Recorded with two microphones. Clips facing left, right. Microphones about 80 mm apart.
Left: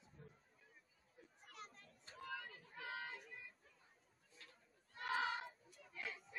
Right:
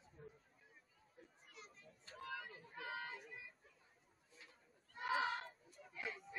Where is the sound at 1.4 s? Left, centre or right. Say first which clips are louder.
Left 6 dB; left.